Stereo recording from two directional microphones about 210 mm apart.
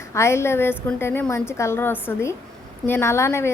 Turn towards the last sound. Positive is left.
turn(degrees=10)  # may be behind; listen again after turning